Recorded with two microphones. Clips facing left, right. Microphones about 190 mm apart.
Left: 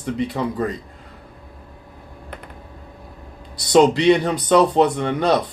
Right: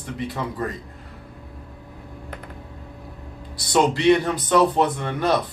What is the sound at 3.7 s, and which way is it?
Speech, 20° left (ahead or behind).